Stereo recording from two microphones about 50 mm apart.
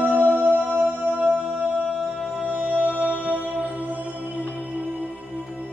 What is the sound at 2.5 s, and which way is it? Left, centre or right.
Music, right.